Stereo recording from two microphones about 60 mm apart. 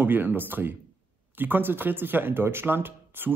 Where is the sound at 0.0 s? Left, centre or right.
Right.